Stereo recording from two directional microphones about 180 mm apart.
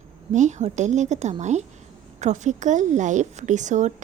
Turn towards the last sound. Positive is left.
turn(degrees=-40)  # may be behind; listen again after turning